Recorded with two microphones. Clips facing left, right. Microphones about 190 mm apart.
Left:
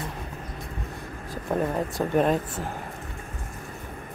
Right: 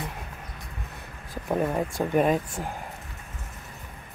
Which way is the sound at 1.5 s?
5° right (ahead or behind).